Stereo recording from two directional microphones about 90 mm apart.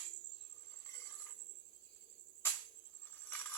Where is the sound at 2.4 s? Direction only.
25° left (ahead or behind).